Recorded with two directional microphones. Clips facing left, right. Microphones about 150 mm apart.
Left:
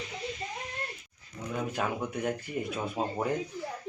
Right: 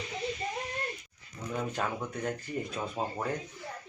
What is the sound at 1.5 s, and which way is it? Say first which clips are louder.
Speech: left 1 dB; 5° left (ahead or behind).